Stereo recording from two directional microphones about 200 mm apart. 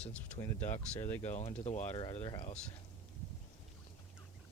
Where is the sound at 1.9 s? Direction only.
20° left (ahead or behind).